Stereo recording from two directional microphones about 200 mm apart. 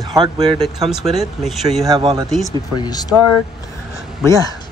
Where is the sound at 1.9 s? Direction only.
20° right (ahead or behind).